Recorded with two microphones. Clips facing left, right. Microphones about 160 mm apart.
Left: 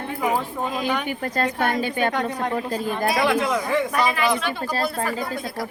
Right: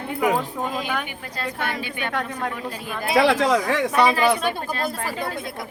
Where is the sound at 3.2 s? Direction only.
90° right.